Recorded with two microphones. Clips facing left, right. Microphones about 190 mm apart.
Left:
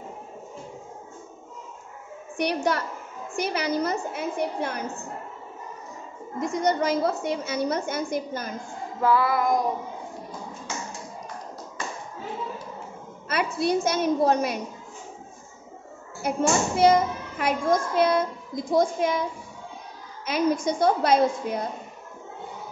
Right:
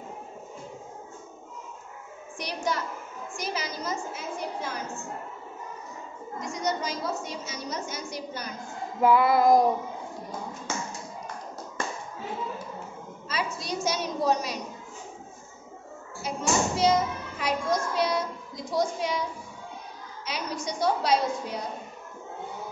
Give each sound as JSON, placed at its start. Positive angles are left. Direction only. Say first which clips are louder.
{"t": 2.3, "sound": "a woman's voice", "louder": "left 6 dB", "side_deg": 60}
{"t": 6.4, "sound": "a woman's voice", "louder": "left 7 dB", "side_deg": 55}
{"t": 9.0, "sound": "child singing", "louder": "right 2 dB", "side_deg": -20}
{"t": 13.3, "sound": "a woman's voice", "louder": "left 8 dB", "side_deg": 60}
{"t": 16.2, "sound": "a child's voice", "louder": "left 4 dB", "side_deg": 55}
{"t": 20.2, "sound": "a woman's voice", "louder": "left 10 dB", "side_deg": 50}